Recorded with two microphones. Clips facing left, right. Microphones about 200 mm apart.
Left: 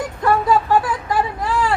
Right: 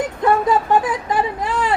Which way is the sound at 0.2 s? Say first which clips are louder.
Even; 20° right (ahead or behind).